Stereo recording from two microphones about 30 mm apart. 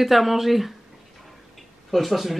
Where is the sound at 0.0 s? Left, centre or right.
Centre.